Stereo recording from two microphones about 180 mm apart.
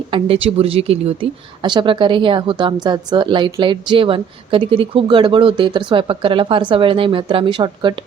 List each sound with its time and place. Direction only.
0.1 s speech: 30° right (ahead or behind)